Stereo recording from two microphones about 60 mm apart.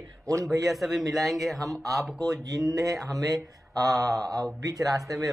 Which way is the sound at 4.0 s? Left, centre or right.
Right.